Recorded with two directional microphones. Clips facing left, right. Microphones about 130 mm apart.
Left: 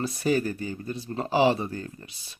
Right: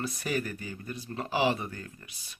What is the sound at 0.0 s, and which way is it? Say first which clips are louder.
Speech: left 7 dB; 30° left (ahead or behind).